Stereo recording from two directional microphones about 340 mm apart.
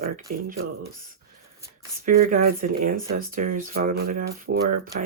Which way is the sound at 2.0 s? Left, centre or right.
Right.